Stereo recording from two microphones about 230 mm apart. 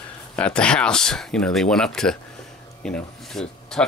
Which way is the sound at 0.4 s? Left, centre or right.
Centre.